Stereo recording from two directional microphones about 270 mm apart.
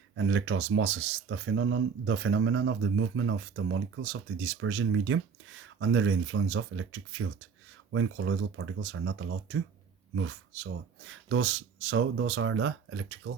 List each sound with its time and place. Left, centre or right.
0.2 s speech: right